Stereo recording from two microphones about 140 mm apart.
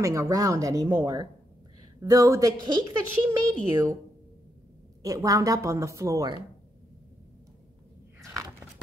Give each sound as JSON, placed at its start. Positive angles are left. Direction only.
{"t": 0.0, "sound": "a woman's voice", "side_deg": -20}
{"t": 5.0, "sound": "a woman's voice", "side_deg": -25}
{"t": 8.2, "sound": "biting", "side_deg": -20}